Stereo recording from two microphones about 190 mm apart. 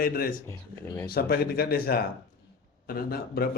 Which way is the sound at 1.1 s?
55° left (ahead or behind).